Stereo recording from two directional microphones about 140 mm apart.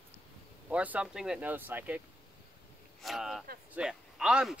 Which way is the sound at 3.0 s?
Centre (ahead or behind).